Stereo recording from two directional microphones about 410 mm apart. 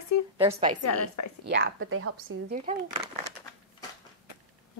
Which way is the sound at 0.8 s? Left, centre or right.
Left.